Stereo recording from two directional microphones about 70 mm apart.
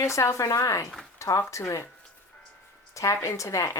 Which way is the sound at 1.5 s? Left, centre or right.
Left.